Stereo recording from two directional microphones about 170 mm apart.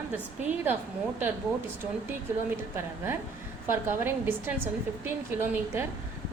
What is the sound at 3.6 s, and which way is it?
A woman's voice, 15° right (ahead or behind).